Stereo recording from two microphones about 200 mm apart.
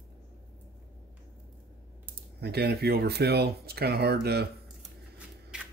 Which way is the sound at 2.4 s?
55° right (ahead or behind).